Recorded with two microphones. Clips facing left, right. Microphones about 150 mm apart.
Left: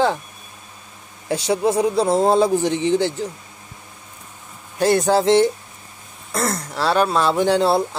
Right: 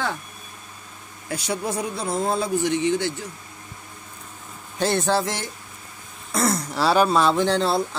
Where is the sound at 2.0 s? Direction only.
35° left (ahead or behind).